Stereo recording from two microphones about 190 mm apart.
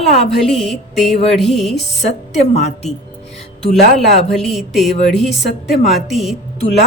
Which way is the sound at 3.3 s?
35° left (ahead or behind).